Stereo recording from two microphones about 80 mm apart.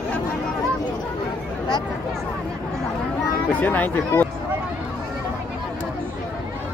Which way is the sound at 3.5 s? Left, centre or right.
Left.